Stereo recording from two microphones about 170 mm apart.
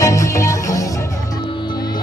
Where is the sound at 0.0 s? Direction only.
20° left (ahead or behind).